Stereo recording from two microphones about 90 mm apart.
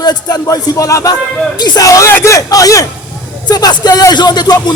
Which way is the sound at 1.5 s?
50° left (ahead or behind).